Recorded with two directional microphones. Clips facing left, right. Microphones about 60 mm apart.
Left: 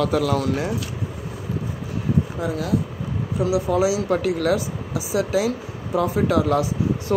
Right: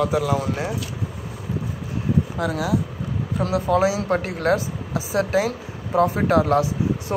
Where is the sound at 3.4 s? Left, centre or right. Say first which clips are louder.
Even; right.